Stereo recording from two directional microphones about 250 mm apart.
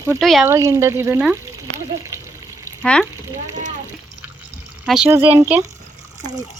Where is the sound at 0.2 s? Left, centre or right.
Centre.